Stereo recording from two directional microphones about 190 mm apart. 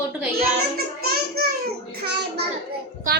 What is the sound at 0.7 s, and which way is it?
Child singing, 55° right (ahead or behind).